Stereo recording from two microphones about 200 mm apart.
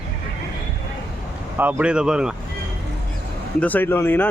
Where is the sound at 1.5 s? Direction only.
5° right (ahead or behind).